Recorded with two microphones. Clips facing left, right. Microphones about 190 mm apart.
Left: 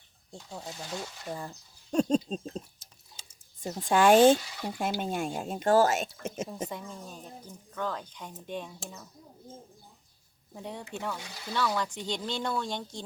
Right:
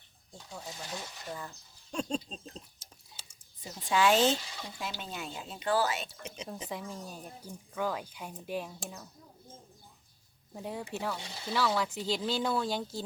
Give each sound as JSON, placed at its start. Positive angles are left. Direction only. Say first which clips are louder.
{"t": 1.3, "sound": "speech", "louder": "left 3 dB", "side_deg": 30}
{"t": 1.9, "sound": "speech", "louder": "left 9 dB", "side_deg": 40}
{"t": 6.7, "sound": "speech", "louder": "even", "side_deg": -5}
{"t": 10.5, "sound": "speech", "louder": "right 1 dB", "side_deg": 0}